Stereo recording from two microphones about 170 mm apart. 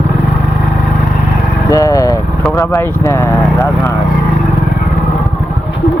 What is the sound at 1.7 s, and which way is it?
Vehicle, 20° left (ahead or behind).